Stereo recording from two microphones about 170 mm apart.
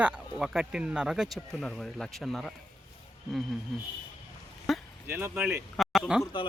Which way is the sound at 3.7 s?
Centre (ahead or behind).